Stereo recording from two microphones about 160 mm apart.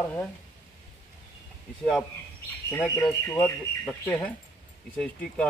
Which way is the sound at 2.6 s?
15° left (ahead or behind).